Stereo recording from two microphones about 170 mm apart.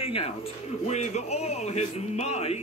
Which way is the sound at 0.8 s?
40° left (ahead or behind).